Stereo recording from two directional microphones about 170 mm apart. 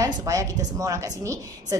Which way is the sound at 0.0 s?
20° right (ahead or behind).